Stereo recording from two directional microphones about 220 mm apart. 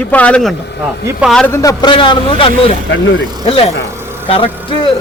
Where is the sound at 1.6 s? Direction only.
15° left (ahead or behind).